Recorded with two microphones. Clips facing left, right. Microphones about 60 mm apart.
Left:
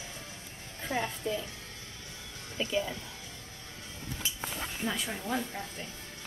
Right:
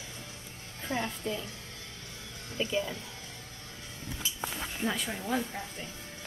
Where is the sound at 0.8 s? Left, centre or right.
Centre.